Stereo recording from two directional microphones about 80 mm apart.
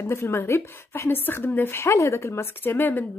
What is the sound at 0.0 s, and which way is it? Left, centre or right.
A woman's voice, left.